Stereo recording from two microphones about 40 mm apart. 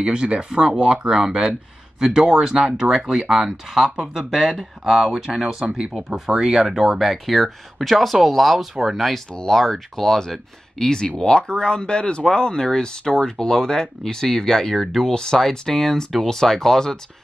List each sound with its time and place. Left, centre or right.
0.0 s speech: right
6.7 s speech: centre
9.5 s speech: centre
15.1 s speech: centre